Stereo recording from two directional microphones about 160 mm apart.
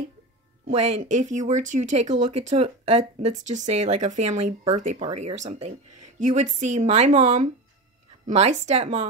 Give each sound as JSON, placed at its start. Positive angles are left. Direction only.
{"t": 0.7, "sound": "speech", "side_deg": -40}